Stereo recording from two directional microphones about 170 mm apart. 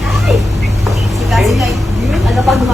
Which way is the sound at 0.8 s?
Centre (ahead or behind).